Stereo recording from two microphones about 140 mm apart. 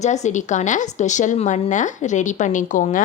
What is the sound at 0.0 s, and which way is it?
A woman's voice, 55° left (ahead or behind).